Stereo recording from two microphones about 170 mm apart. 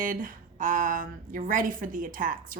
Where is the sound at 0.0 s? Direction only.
50° right (ahead or behind).